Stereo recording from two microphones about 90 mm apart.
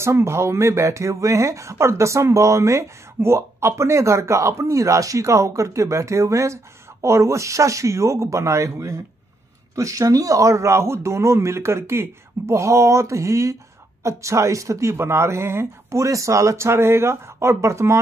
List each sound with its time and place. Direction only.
0.0 s speech: 30° right (ahead or behind)